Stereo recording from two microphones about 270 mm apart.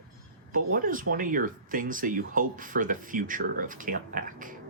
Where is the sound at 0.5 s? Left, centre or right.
Right.